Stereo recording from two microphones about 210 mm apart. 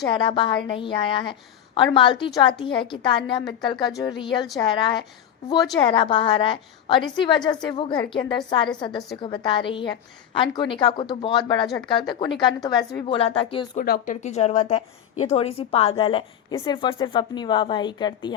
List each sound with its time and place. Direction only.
0.0 s a woman's voice: 20° left (ahead or behind)
13.7 s a woman's voice: 40° left (ahead or behind); by 18.3 s 20° left (ahead or behind)